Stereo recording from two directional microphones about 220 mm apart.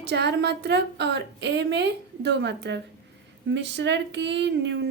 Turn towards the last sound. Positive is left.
turn(degrees=-55)  # may be behind; listen again after turning